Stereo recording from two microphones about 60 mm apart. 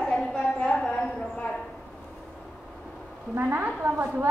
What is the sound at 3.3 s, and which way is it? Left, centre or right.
Speech, right.